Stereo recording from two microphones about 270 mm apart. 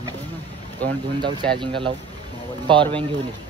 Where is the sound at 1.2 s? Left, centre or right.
Centre.